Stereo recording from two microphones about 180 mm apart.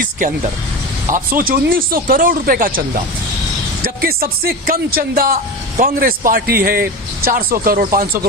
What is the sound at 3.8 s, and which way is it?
Speech, 55° right (ahead or behind).